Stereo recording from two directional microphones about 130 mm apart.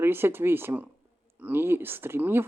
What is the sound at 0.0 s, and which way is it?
Speech, 15° right (ahead or behind).